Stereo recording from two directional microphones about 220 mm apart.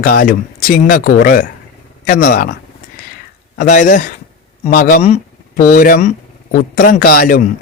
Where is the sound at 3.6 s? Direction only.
35° left (ahead or behind).